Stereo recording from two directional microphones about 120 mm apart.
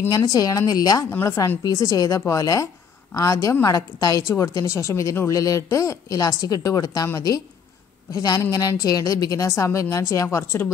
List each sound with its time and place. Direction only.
0.1 s a woman's voice: 30° left (ahead or behind)